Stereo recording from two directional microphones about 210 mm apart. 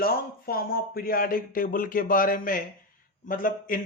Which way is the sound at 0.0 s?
45° left (ahead or behind).